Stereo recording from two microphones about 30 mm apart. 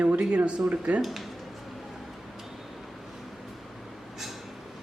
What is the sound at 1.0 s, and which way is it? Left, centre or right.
Speech, centre.